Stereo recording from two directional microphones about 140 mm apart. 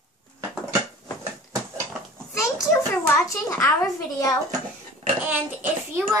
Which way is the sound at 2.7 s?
20° left (ahead or behind).